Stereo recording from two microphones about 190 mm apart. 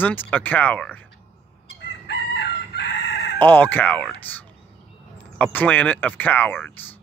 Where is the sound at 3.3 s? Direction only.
10° left (ahead or behind).